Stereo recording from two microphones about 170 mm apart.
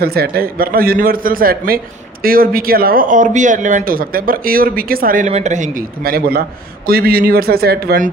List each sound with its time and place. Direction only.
0.0 s a man's voice: 65° right (ahead or behind)